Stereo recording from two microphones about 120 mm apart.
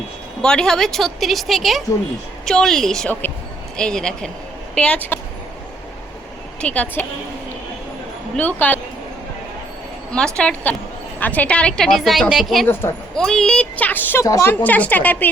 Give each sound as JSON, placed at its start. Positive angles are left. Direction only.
{"t": 0.4, "sound": "a woman's voice", "side_deg": 5}
{"t": 3.1, "sound": "a woman's voice", "side_deg": 15}
{"t": 6.6, "sound": "speech", "side_deg": 10}
{"t": 8.4, "sound": "speech", "side_deg": 15}
{"t": 10.1, "sound": "a woman's voice", "side_deg": 5}
{"t": 12.6, "sound": "a woman's voice", "side_deg": 20}
{"t": 13.1, "sound": "a woman's voice", "side_deg": 5}
{"t": 14.5, "sound": "speech", "side_deg": 15}